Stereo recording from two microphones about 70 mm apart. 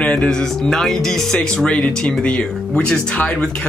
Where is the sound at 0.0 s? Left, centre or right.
Centre.